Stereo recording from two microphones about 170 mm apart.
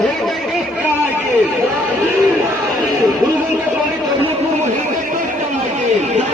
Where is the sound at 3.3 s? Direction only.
15° right (ahead or behind).